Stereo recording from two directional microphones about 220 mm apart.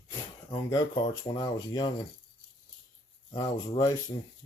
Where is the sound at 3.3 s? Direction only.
20° left (ahead or behind).